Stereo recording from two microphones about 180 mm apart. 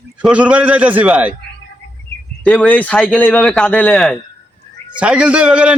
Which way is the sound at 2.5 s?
5° left (ahead or behind).